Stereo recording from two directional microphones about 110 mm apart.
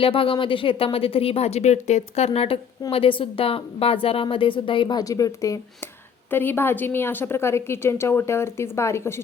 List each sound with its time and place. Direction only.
0.0 s a woman's voice: 55° left (ahead or behind)
2.9 s a woman's voice: 55° left (ahead or behind); by 5.5 s 30° left (ahead or behind)
6.3 s a woman's voice: 20° left (ahead or behind)